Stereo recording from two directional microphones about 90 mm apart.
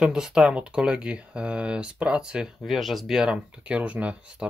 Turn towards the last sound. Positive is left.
turn(degrees=-15)  # may be behind; listen again after turning